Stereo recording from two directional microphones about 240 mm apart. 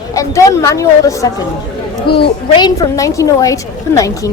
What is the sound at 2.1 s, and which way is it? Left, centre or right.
Speech, left.